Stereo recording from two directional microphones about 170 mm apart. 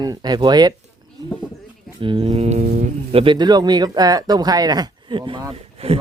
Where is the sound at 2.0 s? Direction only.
30° right (ahead or behind).